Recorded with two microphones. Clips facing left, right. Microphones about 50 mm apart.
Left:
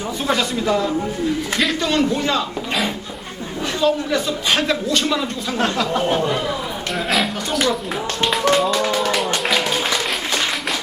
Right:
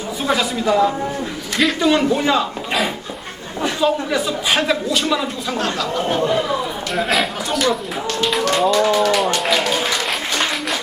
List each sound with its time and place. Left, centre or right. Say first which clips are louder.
0.2 s a man's voice: right 1 dB; centre
3.6 s a man's voice: right 1 dB; centre
5.5 s speech: left 3 dB; left
6.9 s a man's voice: right 2 dB; centre